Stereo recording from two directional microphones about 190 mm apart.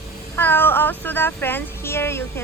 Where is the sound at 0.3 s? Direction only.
10° left (ahead or behind).